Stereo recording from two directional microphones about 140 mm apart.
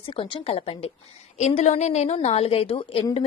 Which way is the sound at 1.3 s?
55° left (ahead or behind).